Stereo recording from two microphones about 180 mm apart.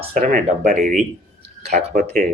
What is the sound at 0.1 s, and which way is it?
Speech, 45° right (ahead or behind).